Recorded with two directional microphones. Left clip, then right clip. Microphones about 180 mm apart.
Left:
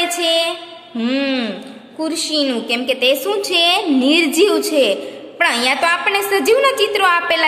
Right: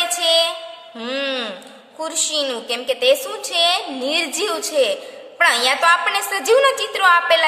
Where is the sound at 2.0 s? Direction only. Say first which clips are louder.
Left 3 dB; 20° right (ahead or behind).